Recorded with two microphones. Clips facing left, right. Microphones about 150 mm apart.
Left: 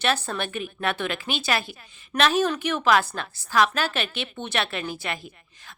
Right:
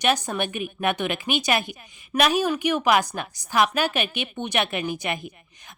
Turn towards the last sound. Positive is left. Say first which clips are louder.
# right 3 dB
turn(degrees=-20)  # may be behind; listen again after turning